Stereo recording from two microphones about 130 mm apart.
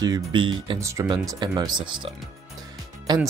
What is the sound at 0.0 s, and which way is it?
Speech, 35° right (ahead or behind).